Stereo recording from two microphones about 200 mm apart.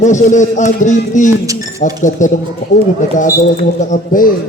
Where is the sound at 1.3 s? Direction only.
15° right (ahead or behind).